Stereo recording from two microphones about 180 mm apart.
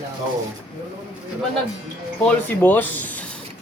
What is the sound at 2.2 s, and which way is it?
Speech, 10° left (ahead or behind).